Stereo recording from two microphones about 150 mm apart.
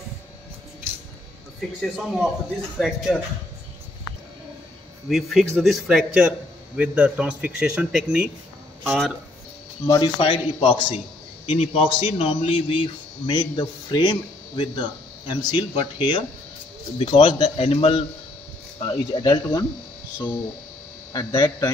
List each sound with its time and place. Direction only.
1.8 s speech: centre (ahead or behind)
5.1 s a man's voice: centre (ahead or behind)
9.8 s a man's voice: 25° left (ahead or behind)
18.8 s speech: 25° left (ahead or behind)
21.1 s speech: 25° left (ahead or behind)